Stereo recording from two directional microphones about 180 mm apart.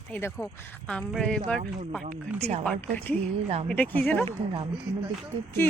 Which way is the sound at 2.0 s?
40° right (ahead or behind).